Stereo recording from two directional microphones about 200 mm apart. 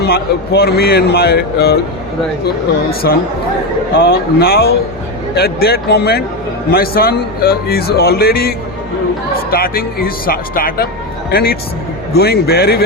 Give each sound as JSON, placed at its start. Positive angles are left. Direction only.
{"t": 0.0, "sound": "speech", "side_deg": 50}
{"t": 3.0, "sound": "speech", "side_deg": 55}